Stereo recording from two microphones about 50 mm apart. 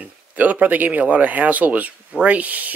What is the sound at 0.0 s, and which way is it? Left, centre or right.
Speech, right.